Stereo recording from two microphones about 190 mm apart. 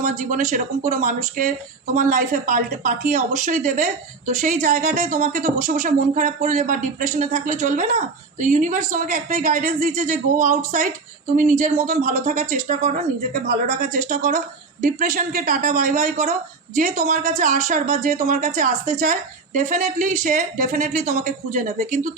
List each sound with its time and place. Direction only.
0.0 s speech: 40° right (ahead or behind)